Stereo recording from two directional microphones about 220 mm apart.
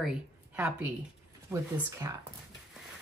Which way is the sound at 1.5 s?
15° right (ahead or behind).